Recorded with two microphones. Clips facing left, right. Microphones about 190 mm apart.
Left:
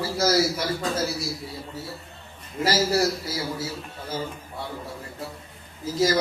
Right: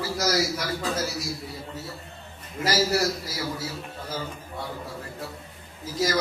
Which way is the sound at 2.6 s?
30° left (ahead or behind).